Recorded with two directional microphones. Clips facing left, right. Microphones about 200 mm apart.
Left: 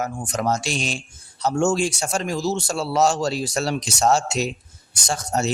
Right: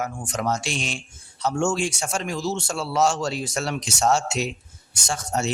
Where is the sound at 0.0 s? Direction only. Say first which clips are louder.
Left 2 dB; 40° left (ahead or behind).